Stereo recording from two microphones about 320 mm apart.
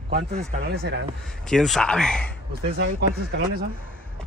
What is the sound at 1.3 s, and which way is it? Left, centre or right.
Speech, centre.